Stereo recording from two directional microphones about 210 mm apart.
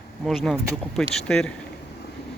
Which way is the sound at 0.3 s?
Centre (ahead or behind).